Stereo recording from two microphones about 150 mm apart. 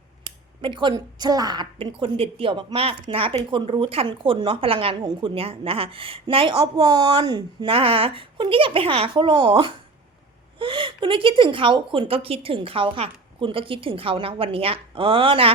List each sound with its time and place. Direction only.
0.3 s a woman's voice: 30° right (ahead or behind)
6.7 s a woman's voice: 25° right (ahead or behind)